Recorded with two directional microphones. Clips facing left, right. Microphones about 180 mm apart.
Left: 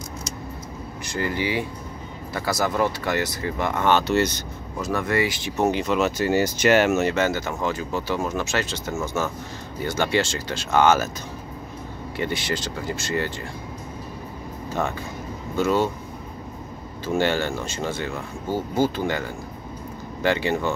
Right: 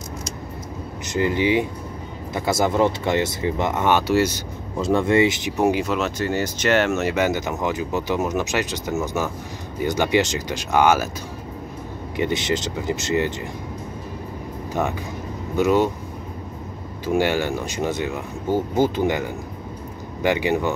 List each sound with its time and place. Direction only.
1.0 s speech: 20° right (ahead or behind)
4.7 s speech: 25° right (ahead or behind)
5.9 s speech: 5° left (ahead or behind)
7.1 s speech: 15° right (ahead or behind)
12.2 s speech: 20° right (ahead or behind)
14.7 s speech: 15° right (ahead or behind)
17.0 s speech: 15° right (ahead or behind)